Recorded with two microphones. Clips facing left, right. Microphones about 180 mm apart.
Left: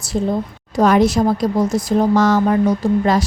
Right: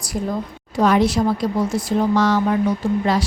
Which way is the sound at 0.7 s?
45° left (ahead or behind).